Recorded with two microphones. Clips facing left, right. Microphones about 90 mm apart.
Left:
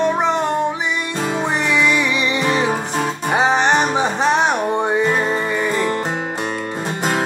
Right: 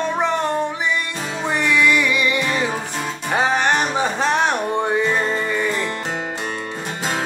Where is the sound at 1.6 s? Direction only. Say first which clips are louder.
Right 2 dB; 20° left (ahead or behind).